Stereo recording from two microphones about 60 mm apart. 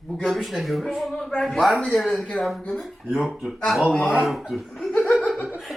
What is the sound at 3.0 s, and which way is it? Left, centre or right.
Speech, centre.